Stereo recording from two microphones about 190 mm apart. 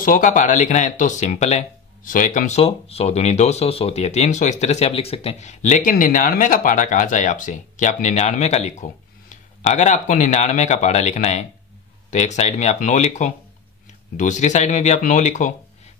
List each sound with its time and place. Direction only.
0.0 s speech: 45° left (ahead or behind)